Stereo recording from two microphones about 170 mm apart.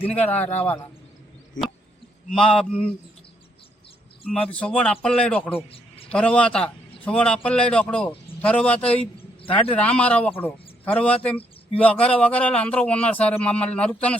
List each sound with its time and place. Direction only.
0.0 s a man's voice: 10° left (ahead or behind)
2.3 s speech: 5° left (ahead or behind)
4.3 s a man's voice: 5° left (ahead or behind)